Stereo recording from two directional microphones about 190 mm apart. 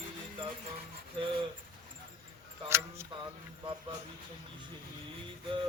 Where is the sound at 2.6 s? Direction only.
15° right (ahead or behind).